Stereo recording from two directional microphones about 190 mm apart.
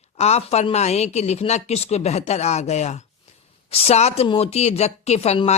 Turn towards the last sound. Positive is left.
turn(degrees=35)  # may be behind; listen again after turning